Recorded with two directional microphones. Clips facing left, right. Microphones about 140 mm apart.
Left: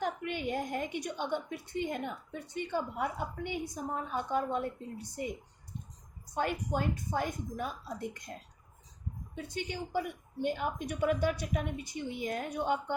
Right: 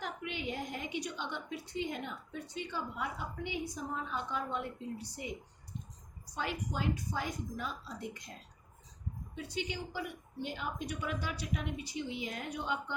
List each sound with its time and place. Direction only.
0.0 s a woman's voice: 50° left (ahead or behind)
6.3 s a woman's voice: 50° left (ahead or behind)
9.3 s a woman's voice: 50° left (ahead or behind)